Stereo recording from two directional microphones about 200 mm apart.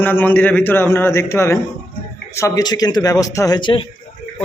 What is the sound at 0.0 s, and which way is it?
Speech, 10° left (ahead or behind).